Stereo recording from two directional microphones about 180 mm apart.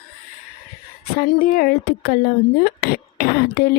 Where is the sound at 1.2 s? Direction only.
55° left (ahead or behind).